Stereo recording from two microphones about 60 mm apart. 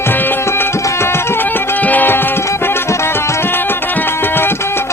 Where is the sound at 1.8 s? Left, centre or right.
Left.